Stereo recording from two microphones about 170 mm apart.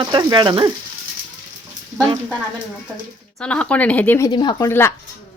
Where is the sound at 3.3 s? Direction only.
5° left (ahead or behind).